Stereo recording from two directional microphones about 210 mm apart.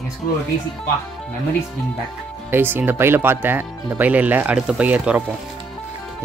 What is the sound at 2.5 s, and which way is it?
Speech, 10° right (ahead or behind).